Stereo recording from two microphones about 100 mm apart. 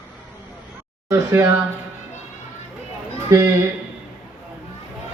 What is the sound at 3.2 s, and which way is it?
Speech, 30° right (ahead or behind).